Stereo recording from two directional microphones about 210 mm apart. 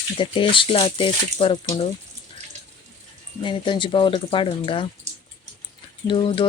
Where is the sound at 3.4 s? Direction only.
25° left (ahead or behind).